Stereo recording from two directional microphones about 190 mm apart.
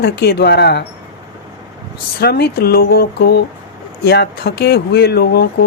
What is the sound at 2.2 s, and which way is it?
Speech, 55° left (ahead or behind).